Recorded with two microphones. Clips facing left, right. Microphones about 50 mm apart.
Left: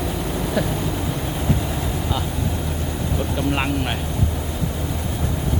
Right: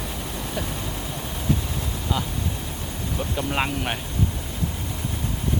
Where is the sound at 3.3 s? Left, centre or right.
Centre.